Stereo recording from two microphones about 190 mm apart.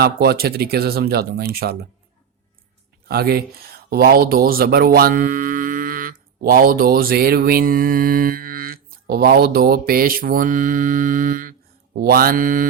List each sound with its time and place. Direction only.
0.0 s speech: 55° right (ahead or behind)
3.1 s speech: 55° right (ahead or behind)